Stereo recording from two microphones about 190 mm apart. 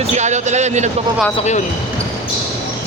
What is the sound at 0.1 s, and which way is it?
Speech, 40° right (ahead or behind).